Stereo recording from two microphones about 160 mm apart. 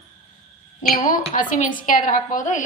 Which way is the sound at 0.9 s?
55° left (ahead or behind).